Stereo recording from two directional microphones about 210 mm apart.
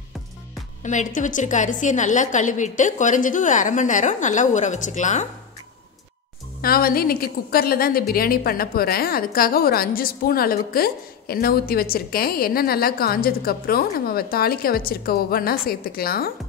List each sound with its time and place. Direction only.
0.8 s a woman's voice: 35° left (ahead or behind)
6.6 s a woman's voice: 45° left (ahead or behind)